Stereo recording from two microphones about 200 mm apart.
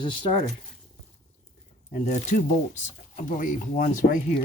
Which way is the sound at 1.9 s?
35° left (ahead or behind).